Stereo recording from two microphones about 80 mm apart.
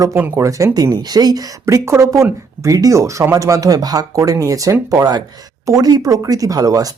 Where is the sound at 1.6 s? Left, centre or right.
Right.